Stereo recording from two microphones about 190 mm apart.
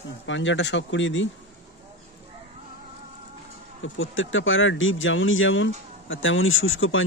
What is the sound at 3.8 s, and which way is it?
Speech, 90° left.